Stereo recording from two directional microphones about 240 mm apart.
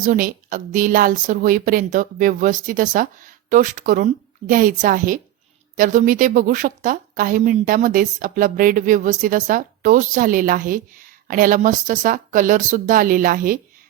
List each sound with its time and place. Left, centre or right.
0.0 s a woman's voice: right